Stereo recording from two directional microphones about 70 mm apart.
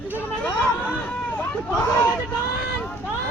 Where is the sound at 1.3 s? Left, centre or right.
Left.